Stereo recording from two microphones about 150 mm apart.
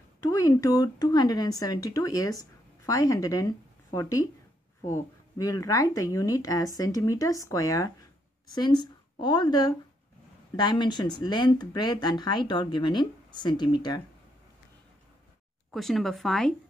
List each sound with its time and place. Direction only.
0.2 s speech: 20° left (ahead or behind)
15.7 s speech: centre (ahead or behind)